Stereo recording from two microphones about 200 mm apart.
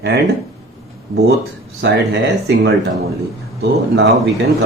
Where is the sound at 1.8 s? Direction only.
60° right (ahead or behind).